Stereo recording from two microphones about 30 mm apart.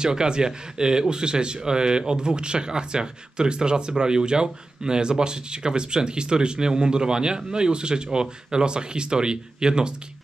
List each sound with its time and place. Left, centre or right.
0.0 s speech: right